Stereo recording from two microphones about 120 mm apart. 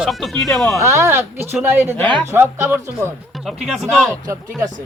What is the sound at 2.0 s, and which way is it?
Speech, 10° left (ahead or behind).